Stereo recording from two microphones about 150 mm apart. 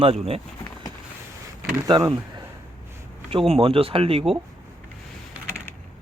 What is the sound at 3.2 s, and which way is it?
Speech, 40° right (ahead or behind).